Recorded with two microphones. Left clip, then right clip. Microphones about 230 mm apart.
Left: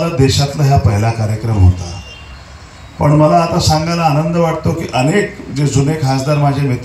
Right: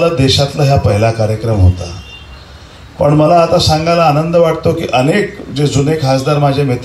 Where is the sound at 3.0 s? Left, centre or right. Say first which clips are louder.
Right 2 dB; right.